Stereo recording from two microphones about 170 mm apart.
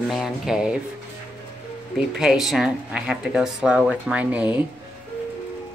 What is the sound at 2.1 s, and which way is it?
Speech, 5° right (ahead or behind).